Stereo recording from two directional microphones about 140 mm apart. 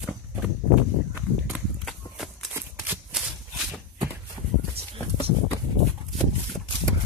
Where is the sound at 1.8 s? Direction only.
Centre (ahead or behind).